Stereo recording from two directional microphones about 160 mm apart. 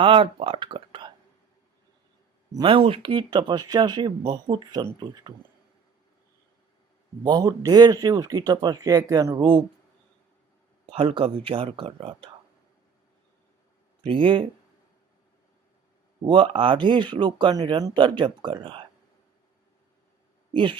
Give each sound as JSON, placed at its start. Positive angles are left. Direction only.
{"t": 0.0, "sound": "speech", "side_deg": -35}
{"t": 2.6, "sound": "speech", "side_deg": -35}
{"t": 7.3, "sound": "speech", "side_deg": -25}
{"t": 10.8, "sound": "speech", "side_deg": -35}
{"t": 14.0, "sound": "speech", "side_deg": -30}
{"t": 16.2, "sound": "speech", "side_deg": -35}
{"t": 20.5, "sound": "speech", "side_deg": -30}